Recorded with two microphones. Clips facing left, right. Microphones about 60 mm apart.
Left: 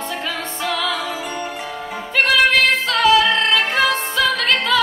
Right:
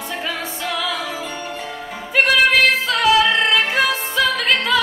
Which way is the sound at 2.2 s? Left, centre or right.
Centre.